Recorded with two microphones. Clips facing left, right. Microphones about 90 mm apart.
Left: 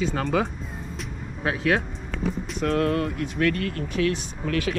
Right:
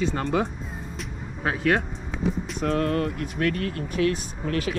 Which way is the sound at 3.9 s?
35° right (ahead or behind).